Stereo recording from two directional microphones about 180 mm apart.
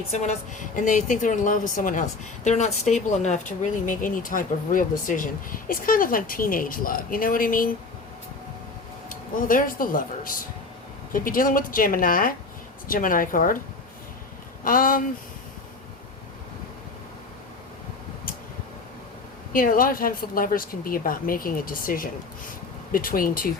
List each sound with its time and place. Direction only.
0.1 s a woman's voice: 40° left (ahead or behind)
9.0 s a woman's voice: 50° left (ahead or behind)
14.6 s speech: 50° left (ahead or behind)
19.5 s a woman's voice: 50° left (ahead or behind)